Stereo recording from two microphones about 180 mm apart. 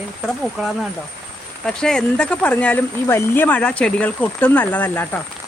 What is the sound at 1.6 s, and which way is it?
Speech, 5° left (ahead or behind).